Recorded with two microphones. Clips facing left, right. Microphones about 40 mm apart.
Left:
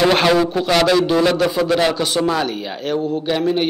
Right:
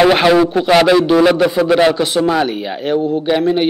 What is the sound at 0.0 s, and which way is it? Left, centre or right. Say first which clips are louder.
A man's voice: right 4 dB; centre.